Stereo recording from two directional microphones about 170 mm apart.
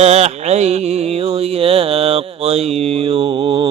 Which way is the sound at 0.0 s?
40° right (ahead or behind).